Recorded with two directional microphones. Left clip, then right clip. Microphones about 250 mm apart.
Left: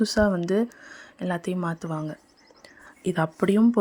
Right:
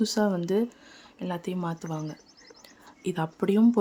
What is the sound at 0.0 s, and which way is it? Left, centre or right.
Speech, centre.